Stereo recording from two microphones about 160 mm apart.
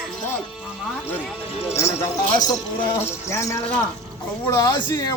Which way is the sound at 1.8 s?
15° left (ahead or behind).